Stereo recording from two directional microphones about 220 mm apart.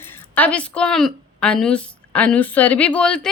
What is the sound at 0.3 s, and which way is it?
A woman's voice, 5° left (ahead or behind).